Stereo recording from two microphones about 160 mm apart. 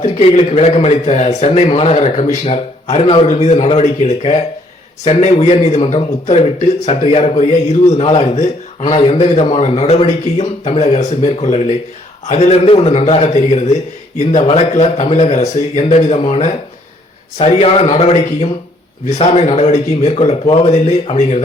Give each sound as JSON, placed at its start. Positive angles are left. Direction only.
{"t": 0.0, "sound": "a man's voice", "side_deg": 40}